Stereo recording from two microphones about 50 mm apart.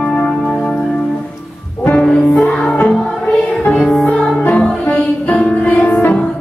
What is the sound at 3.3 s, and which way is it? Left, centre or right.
Music, centre.